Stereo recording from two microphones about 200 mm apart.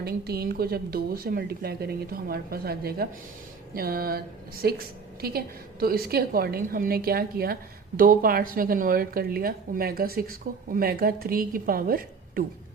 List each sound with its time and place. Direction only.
0.0 s a woman's voice: 50° right (ahead or behind)